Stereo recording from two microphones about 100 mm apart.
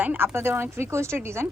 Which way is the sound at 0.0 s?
20° right (ahead or behind).